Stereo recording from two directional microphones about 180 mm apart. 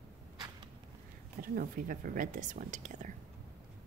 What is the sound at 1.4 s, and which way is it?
Speech, 50° right (ahead or behind).